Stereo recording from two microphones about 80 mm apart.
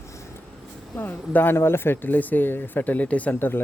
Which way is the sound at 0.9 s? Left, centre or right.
Left.